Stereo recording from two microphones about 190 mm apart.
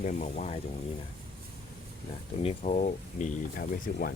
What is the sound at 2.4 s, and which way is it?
Speech, 35° left (ahead or behind).